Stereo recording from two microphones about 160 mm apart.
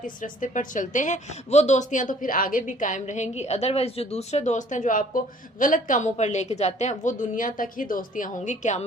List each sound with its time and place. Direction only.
0.0 s a woman's voice: 55° left (ahead or behind)